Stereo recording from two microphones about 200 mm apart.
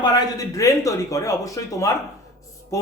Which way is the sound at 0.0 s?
15° left (ahead or behind).